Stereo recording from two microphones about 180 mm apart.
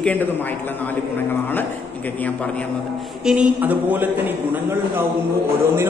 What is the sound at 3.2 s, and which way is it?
Speech, 5° right (ahead or behind).